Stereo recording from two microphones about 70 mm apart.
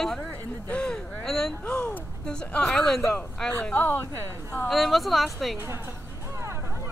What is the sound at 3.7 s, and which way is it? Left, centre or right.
Speech, left.